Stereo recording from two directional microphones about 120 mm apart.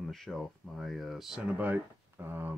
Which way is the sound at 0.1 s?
Centre (ahead or behind).